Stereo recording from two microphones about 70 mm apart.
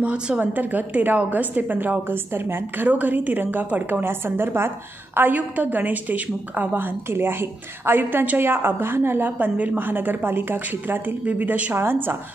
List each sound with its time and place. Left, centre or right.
0.0 s a woman's voice: centre
11.7 s a woman's voice: right